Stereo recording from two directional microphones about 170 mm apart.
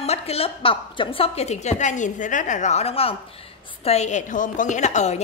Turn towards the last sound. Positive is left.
turn(degrees=45)  # may be behind; listen again after turning